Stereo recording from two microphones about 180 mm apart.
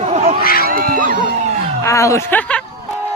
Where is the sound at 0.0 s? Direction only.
35° right (ahead or behind).